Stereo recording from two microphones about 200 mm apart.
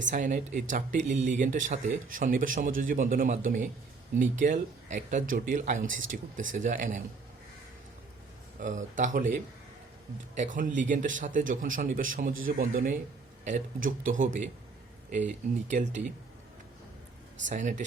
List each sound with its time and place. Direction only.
0.1 s a man's voice: 40° right (ahead or behind)
8.6 s a man's voice: 40° right (ahead or behind)
10.3 s a man's voice: 40° right (ahead or behind)
15.7 s a man's voice: 40° right (ahead or behind)
17.4 s a man's voice: 40° right (ahead or behind)